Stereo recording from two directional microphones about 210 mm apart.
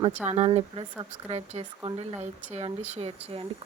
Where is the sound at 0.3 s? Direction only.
30° right (ahead or behind).